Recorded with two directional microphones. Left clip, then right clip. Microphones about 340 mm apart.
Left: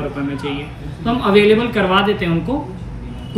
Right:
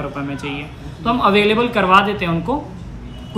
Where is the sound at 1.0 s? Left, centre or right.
Centre.